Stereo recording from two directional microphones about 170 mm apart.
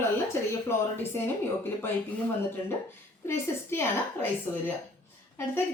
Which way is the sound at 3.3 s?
15° left (ahead or behind).